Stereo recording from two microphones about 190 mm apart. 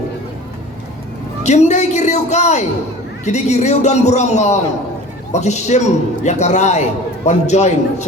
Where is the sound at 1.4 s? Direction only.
35° left (ahead or behind).